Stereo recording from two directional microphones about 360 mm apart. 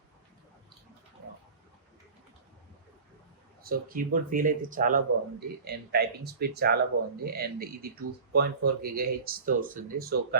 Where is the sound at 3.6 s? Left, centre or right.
Right.